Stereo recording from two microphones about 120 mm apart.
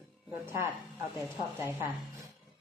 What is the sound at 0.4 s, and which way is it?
A woman's voice, 20° right (ahead or behind).